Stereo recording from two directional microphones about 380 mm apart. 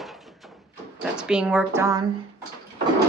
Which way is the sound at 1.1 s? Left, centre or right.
Centre.